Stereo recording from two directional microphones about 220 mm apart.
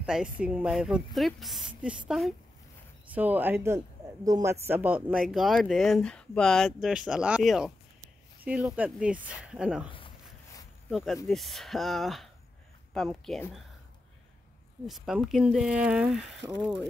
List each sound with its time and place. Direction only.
0.0 s a man's voice: 5° right (ahead or behind)
9.8 s a sound: 25° left (ahead or behind)
10.9 s speech: centre (ahead or behind)
14.9 s speech: centre (ahead or behind)